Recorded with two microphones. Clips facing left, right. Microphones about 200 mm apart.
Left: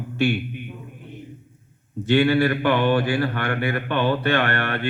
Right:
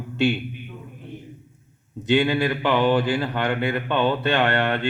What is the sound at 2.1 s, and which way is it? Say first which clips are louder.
Speech: left 2 dB; 15° right (ahead or behind).